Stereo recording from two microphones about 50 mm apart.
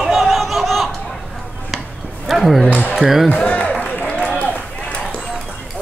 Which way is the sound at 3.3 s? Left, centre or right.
Left.